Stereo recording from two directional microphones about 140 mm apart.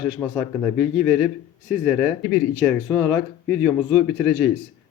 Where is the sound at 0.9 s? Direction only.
Centre (ahead or behind).